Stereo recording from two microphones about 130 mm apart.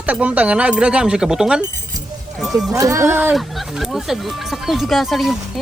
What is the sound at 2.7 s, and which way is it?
Speech, 25° right (ahead or behind).